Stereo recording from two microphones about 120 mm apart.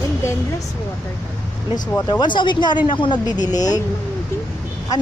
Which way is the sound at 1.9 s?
35° left (ahead or behind).